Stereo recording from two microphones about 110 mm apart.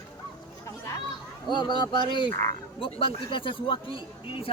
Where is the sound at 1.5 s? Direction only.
45° left (ahead or behind).